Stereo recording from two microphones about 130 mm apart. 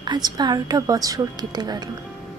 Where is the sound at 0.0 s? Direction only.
35° right (ahead or behind).